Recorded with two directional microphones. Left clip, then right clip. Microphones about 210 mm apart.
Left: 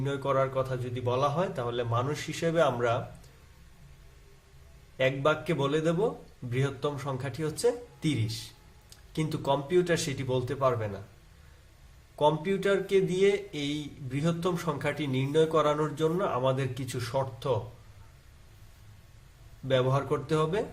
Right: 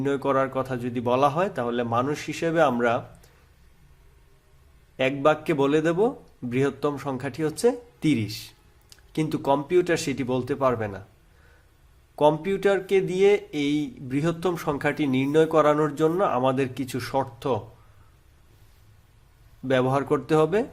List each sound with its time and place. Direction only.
0.0 s speech: 40° right (ahead or behind)
4.9 s speech: 35° right (ahead or behind)
12.1 s speech: 40° right (ahead or behind)
19.6 s speech: 40° right (ahead or behind)